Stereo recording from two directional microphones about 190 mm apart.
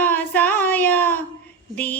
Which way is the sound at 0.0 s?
10° left (ahead or behind).